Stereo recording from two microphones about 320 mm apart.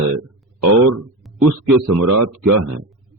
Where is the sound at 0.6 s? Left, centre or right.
Right.